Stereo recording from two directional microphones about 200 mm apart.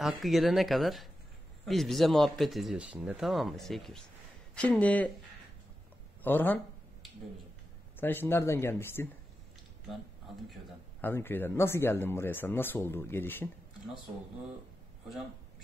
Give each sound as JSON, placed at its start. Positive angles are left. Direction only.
{"t": 0.0, "sound": "speech", "side_deg": 0}
{"t": 6.2, "sound": "speech", "side_deg": 10}
{"t": 8.0, "sound": "speech", "side_deg": 10}
{"t": 10.5, "sound": "speech", "side_deg": 10}